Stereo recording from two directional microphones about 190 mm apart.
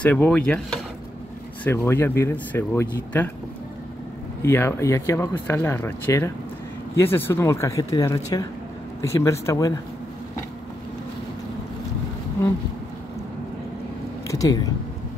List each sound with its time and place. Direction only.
0.0 s speech: 10° left (ahead or behind)
4.4 s speech: 15° left (ahead or behind)
14.2 s speech: 15° left (ahead or behind)